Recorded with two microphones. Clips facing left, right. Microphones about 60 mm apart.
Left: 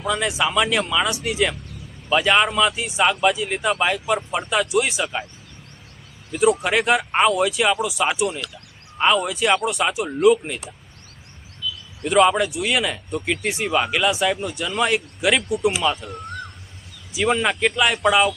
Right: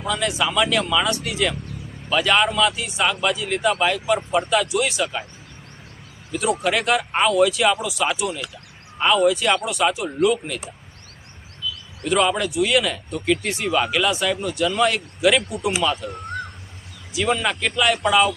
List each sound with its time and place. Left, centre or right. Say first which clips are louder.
0.0 s speech: left 1 dB; centre
6.3 s speech: left 3 dB; centre
12.0 s speech: left 3 dB; centre